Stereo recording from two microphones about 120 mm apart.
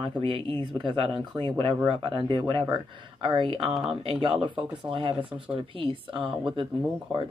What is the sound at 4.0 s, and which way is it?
Speech, 50° right (ahead or behind).